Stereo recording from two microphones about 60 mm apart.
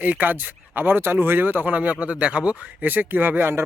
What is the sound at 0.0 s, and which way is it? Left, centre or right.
Speech, right.